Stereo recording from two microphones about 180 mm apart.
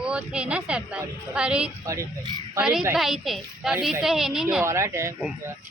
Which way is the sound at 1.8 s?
15° right (ahead or behind).